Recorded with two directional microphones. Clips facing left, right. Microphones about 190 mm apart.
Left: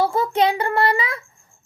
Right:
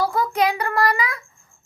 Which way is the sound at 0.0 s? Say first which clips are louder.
Left 2 dB; 25° left (ahead or behind).